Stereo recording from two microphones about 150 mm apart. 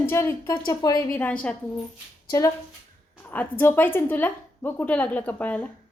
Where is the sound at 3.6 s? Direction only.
15° left (ahead or behind).